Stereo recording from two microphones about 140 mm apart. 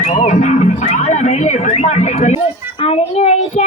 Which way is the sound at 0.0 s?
55° left (ahead or behind).